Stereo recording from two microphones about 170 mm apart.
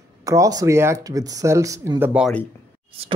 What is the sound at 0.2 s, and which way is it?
Speech, 20° right (ahead or behind).